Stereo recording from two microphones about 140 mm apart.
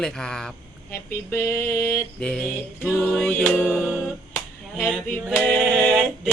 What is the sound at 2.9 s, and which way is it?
A capella, centre (ahead or behind).